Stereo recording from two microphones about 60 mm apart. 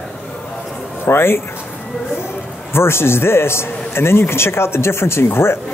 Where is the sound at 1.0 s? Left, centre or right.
Left.